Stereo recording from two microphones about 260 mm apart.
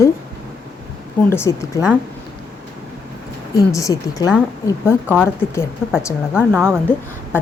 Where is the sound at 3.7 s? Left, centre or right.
Centre.